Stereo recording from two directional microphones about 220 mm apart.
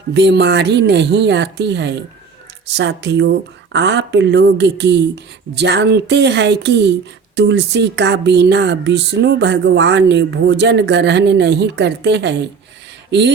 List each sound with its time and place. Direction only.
0.1 s speech: 50° right (ahead or behind)